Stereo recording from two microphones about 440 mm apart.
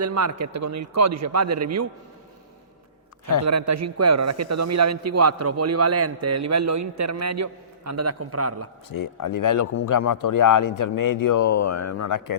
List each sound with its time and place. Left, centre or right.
0.0 s a man's voice: right
3.4 s a man's voice: right
8.9 s a man's voice: left